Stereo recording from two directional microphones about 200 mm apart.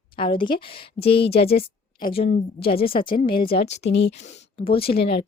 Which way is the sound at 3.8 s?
60° left (ahead or behind).